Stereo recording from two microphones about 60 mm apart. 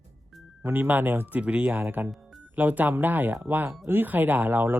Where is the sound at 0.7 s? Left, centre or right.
Right.